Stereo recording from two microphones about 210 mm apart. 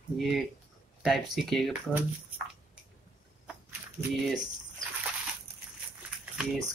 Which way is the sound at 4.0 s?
5° right (ahead or behind).